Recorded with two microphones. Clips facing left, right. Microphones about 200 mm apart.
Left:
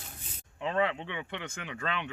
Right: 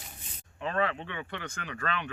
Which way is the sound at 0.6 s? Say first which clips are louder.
Left 1 dB; 15° left (ahead or behind).